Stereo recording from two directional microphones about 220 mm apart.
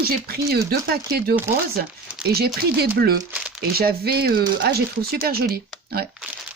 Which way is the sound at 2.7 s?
45° right (ahead or behind).